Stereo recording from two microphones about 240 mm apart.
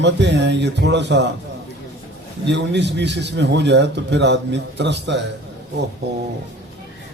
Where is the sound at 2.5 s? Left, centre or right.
Right.